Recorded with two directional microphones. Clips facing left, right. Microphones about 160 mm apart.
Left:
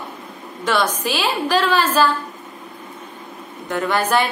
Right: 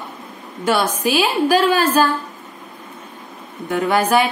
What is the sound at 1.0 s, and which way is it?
A woman's voice, 10° right (ahead or behind).